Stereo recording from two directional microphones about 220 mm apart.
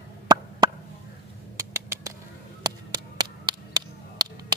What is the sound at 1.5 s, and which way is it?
Bird, 10° right (ahead or behind).